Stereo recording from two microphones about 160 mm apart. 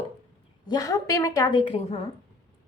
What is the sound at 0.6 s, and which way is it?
A woman's voice, 25° left (ahead or behind).